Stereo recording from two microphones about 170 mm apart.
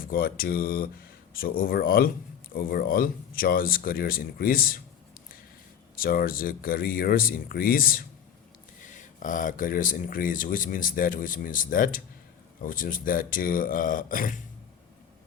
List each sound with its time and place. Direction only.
0.0 s speech: 60° left (ahead or behind)
6.0 s speech: 60° left (ahead or behind)